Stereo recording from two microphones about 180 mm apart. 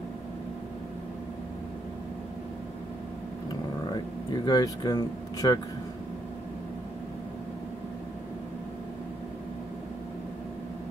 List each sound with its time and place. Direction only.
4.5 s speech: 20° left (ahead or behind)